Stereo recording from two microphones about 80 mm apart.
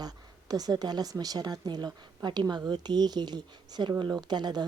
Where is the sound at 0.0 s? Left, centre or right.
Right.